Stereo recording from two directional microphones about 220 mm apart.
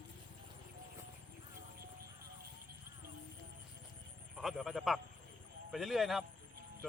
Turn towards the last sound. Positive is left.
turn(degrees=0)  # may be behind; listen again after turning